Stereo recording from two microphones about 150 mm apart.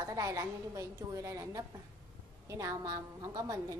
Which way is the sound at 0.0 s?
20° right (ahead or behind).